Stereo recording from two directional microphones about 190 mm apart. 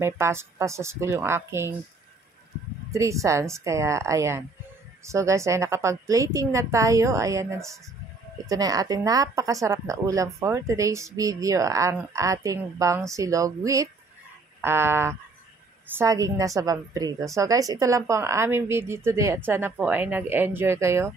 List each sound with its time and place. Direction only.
0.0 s speech: 15° right (ahead or behind)
2.9 s speech: 15° right (ahead or behind)